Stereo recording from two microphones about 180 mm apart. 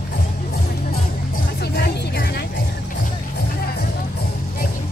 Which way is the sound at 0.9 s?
60° left (ahead or behind).